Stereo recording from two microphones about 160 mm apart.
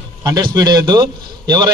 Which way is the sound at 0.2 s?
25° right (ahead or behind).